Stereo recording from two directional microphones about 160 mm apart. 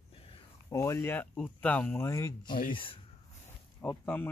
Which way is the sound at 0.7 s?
20° left (ahead or behind).